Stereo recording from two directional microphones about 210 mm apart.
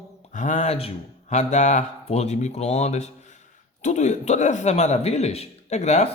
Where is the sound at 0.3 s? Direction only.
35° left (ahead or behind).